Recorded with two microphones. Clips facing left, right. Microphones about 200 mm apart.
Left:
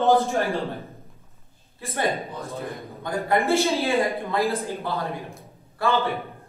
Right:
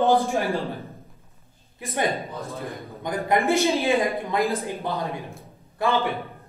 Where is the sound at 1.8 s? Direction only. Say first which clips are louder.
Right 1 dB; 15° right (ahead or behind).